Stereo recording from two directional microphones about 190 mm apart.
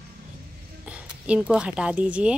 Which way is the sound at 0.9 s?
5° right (ahead or behind).